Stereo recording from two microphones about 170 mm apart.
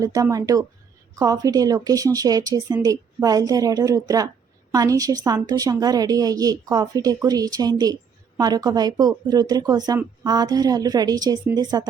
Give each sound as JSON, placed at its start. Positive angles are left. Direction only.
{"t": 0.0, "sound": "a woman's voice", "side_deg": -20}